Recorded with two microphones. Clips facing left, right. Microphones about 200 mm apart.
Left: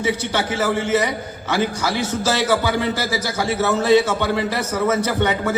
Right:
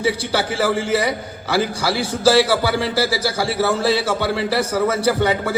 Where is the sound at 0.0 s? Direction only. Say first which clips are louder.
Right 1 dB; 35° right (ahead or behind).